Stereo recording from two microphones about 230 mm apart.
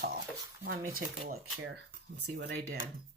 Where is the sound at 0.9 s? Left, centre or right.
Right.